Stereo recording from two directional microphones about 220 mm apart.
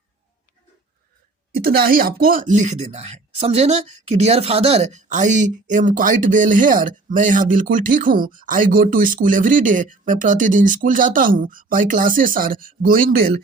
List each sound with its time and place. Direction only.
1.6 s speech: 45° right (ahead or behind)